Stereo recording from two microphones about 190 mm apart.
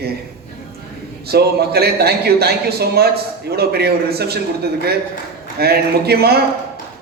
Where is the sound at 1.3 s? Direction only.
55° right (ahead or behind).